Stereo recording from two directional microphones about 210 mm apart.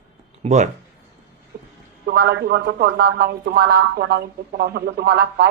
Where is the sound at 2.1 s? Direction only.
45° right (ahead or behind).